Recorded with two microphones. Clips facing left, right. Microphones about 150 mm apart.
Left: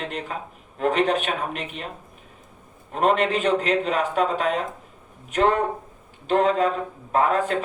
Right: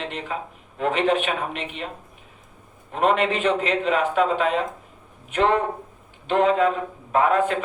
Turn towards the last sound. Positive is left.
turn(degrees=35)  # may be behind; listen again after turning